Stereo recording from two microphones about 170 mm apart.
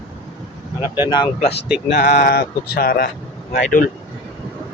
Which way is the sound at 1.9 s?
50° left (ahead or behind).